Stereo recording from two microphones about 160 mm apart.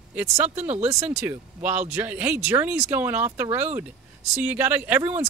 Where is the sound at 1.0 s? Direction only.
10° right (ahead or behind).